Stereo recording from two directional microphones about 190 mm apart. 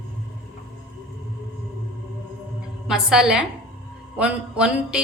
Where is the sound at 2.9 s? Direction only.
5° right (ahead or behind).